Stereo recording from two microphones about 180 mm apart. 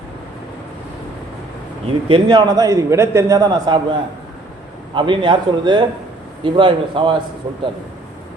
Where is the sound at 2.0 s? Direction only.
30° right (ahead or behind).